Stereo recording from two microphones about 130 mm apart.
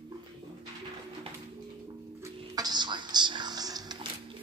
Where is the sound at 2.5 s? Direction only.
30° right (ahead or behind).